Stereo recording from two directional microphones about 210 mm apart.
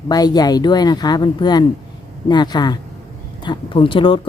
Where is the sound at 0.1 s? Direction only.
20° left (ahead or behind).